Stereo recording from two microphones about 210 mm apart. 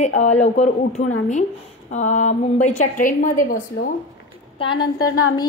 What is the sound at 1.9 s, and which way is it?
A woman's voice, 35° left (ahead or behind).